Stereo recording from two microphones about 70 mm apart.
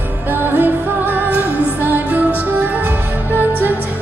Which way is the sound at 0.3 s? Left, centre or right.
Right.